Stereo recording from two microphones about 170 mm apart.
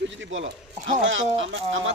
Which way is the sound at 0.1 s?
90° right.